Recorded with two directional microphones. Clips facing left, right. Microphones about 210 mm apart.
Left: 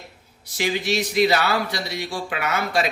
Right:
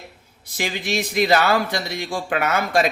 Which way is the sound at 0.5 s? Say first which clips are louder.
Left 2 dB; 50° right (ahead or behind).